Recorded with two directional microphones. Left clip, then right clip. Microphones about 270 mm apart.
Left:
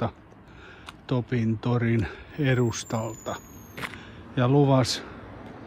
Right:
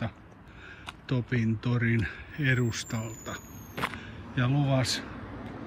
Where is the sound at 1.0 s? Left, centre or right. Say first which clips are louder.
Left 3 dB; centre.